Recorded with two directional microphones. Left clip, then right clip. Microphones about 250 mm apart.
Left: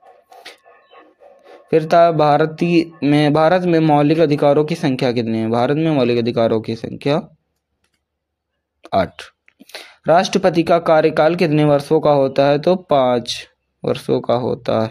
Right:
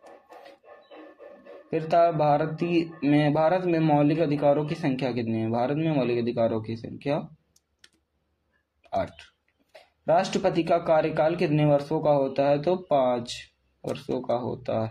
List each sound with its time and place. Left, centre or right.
1.7 s speech: left
8.8 s speech: left